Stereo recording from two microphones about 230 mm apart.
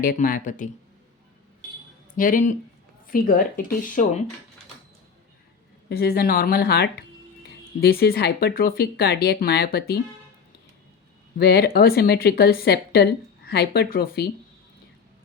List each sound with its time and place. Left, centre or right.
0.0 s speech: left
2.1 s speech: left
5.9 s speech: left
11.3 s speech: left